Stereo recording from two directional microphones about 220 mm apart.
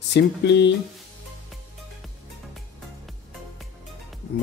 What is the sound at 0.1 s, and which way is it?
Speech, 50° left (ahead or behind).